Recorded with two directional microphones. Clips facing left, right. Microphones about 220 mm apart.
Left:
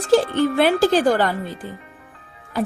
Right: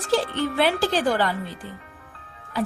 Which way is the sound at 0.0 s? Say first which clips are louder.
Left 7 dB; 45° left (ahead or behind).